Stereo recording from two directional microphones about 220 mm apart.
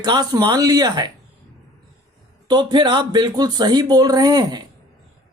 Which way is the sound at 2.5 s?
20° right (ahead or behind).